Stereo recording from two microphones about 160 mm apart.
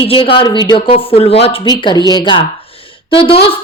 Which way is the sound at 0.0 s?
35° left (ahead or behind).